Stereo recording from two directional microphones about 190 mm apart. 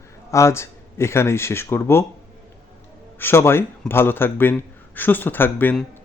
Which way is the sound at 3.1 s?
10° left (ahead or behind).